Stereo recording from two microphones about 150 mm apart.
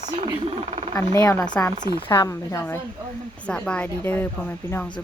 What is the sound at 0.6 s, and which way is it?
Speech, 45° right (ahead or behind).